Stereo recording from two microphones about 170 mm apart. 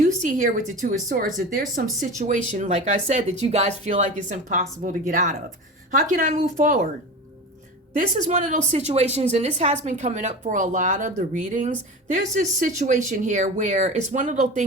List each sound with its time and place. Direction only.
0.0 s a woman's voice: 45° right (ahead or behind)
7.9 s a woman's voice: 45° right (ahead or behind)